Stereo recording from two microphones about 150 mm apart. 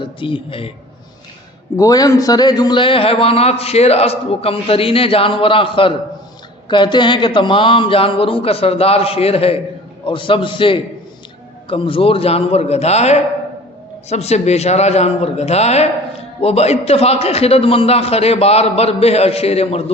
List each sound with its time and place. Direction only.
0.0 s a man's voice: 35° left (ahead or behind)
1.7 s a man's voice: 25° left (ahead or behind); by 19.8 s 45° left (ahead or behind)